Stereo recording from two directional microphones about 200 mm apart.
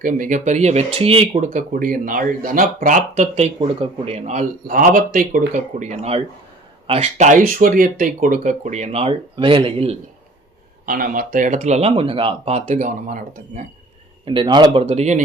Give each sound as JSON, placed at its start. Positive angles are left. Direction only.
{"t": 0.0, "sound": "speech", "side_deg": -40}
{"t": 10.8, "sound": "speech", "side_deg": -45}
{"t": 14.3, "sound": "speech", "side_deg": -25}